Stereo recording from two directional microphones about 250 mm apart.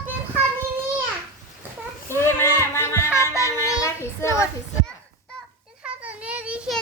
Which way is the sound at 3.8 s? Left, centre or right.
Centre.